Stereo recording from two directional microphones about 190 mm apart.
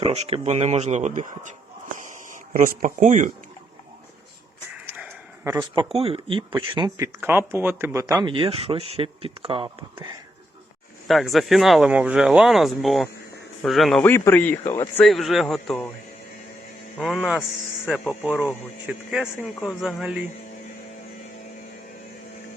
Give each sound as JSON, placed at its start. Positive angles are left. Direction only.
{"t": 0.0, "sound": "speech", "side_deg": -30}
{"t": 4.9, "sound": "a sound", "side_deg": -10}
{"t": 5.5, "sound": "speech", "side_deg": -25}
{"t": 11.1, "sound": "speech", "side_deg": 0}
{"t": 15.0, "sound": "speech", "side_deg": 0}
{"t": 17.0, "sound": "speech", "side_deg": 0}